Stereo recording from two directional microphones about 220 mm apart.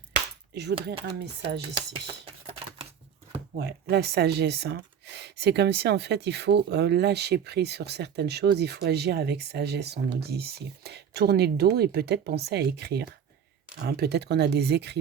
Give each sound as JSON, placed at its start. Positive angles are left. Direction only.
{"t": 0.5, "sound": "speech", "side_deg": -50}
{"t": 3.5, "sound": "speech", "side_deg": -45}